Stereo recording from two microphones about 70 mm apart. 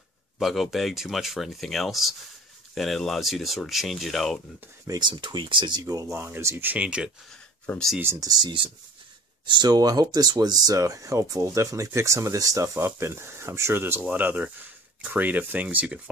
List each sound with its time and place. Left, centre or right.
0.4 s speech: centre
4.8 s speech: right
5.9 s speech: right
6.1 s speech: right
6.8 s speech: centre
7.7 s speech: left
8.2 s speech: right
12.7 s speech: right
14.0 s speech: right